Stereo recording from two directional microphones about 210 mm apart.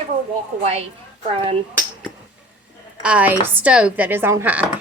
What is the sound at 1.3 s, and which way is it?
Speech, 25° right (ahead or behind).